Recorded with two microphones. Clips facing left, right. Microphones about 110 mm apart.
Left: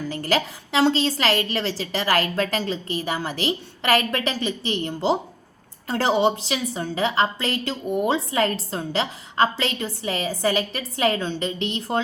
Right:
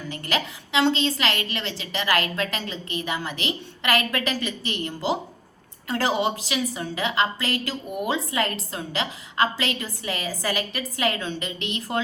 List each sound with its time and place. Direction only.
0.1 s a woman's voice: 35° left (ahead or behind)